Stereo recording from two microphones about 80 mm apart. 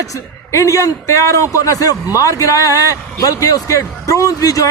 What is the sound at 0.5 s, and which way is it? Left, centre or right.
Speech, left.